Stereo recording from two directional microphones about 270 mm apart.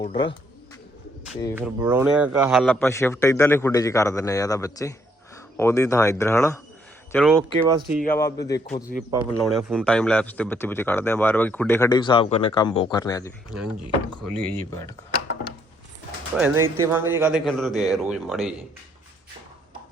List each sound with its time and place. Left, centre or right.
0.0 s speech: left
1.5 s speech: centre
8.1 s speech: centre
8.7 s speech: left
9.0 s speech: centre
9.4 s speech: centre
13.5 s speech: centre
15.1 s a sound: left
16.7 s speech: centre